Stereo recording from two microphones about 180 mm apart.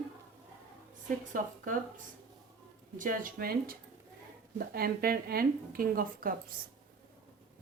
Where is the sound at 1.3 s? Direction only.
50° right (ahead or behind).